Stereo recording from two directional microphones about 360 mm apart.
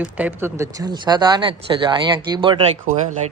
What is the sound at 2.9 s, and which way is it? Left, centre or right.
Speech, right.